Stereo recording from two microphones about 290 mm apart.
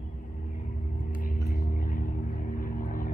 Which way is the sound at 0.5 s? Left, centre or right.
Left.